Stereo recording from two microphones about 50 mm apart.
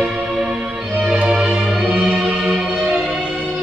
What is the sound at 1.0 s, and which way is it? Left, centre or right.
Music, right.